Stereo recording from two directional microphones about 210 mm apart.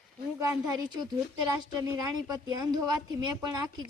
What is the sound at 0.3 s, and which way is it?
A woman's voice, 10° right (ahead or behind).